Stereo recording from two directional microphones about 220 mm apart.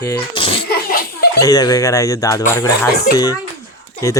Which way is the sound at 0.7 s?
45° left (ahead or behind).